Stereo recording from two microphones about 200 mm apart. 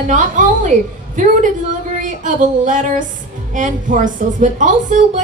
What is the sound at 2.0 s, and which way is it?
Speech, 40° right (ahead or behind).